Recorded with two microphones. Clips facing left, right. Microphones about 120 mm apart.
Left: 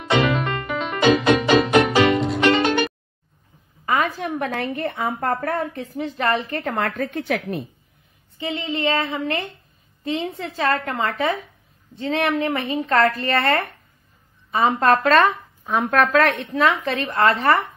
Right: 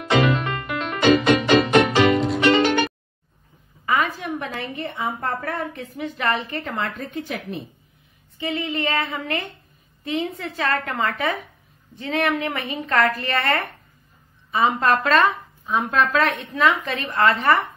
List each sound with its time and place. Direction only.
0.0 s music: centre (ahead or behind)
3.8 s a woman's voice: 40° left (ahead or behind)
5.3 s speech: 35° left (ahead or behind)
7.0 s a woman's voice: 65° left (ahead or behind)
8.5 s a sound: 30° left (ahead or behind)
10.0 s speech: 30° left (ahead or behind)